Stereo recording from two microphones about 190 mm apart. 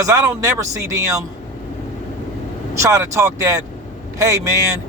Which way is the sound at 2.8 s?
15° right (ahead or behind).